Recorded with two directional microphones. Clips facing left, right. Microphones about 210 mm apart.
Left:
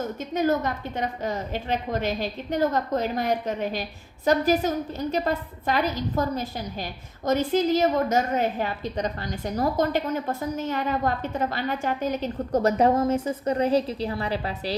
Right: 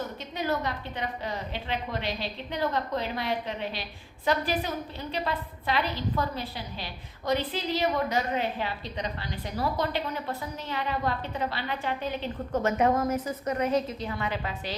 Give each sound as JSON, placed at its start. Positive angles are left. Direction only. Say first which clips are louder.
{"t": 0.3, "sound": "a woman's voice", "louder": "left 6 dB", "side_deg": 45}